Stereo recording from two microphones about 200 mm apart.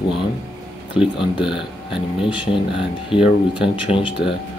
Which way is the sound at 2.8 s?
5° right (ahead or behind).